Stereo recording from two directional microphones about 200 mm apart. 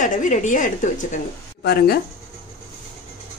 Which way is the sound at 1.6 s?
55° left (ahead or behind).